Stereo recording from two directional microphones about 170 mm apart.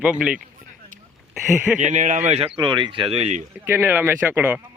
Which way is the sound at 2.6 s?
25° right (ahead or behind).